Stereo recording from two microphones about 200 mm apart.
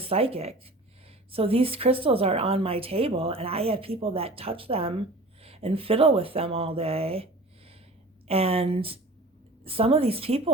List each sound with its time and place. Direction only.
0.0 s a woman's voice: 30° right (ahead or behind)
8.3 s a woman's voice: 30° right (ahead or behind)